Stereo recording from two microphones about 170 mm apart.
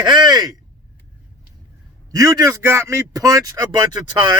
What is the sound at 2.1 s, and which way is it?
A man's voice, 20° right (ahead or behind).